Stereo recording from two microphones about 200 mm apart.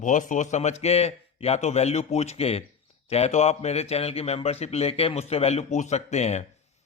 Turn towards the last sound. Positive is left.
turn(degrees=35)  # may be behind; listen again after turning